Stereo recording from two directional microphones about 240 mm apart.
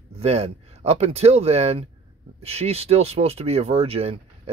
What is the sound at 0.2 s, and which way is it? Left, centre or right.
Speech, right.